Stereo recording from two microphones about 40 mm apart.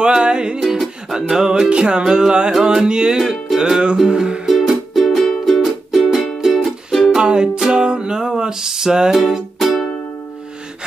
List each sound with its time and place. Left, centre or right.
0.0 s music: centre
1.7 s music: right
4.5 s music: centre
7.2 s music: right
9.2 s music: centre